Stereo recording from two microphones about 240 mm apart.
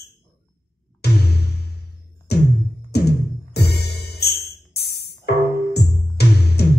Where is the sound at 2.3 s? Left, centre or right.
Left.